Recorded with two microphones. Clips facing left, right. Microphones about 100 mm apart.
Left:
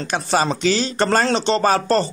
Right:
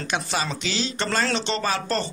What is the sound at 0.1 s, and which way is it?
Speech, 40° left (ahead or behind).